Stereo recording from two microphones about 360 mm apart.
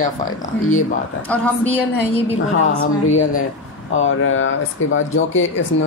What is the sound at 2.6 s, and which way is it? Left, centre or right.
Speech, left.